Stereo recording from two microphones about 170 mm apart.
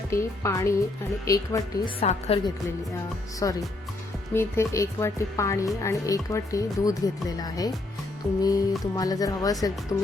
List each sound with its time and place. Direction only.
0.1 s speech: 15° left (ahead or behind)
2.0 s a woman's voice: 35° left (ahead or behind)
3.4 s speech: 20° left (ahead or behind)